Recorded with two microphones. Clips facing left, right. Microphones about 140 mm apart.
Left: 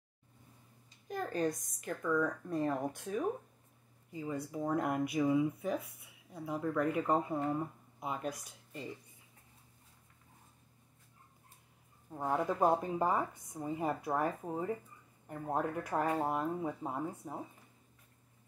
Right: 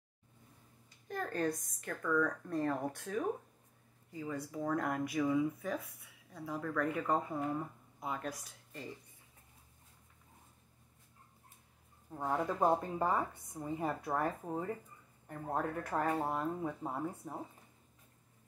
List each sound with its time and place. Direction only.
1.0 s a woman's voice: 15° left (ahead or behind)
12.1 s a woman's voice: 10° left (ahead or behind)